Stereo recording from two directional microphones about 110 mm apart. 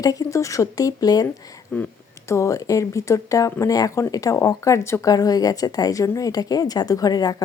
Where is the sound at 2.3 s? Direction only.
30° left (ahead or behind).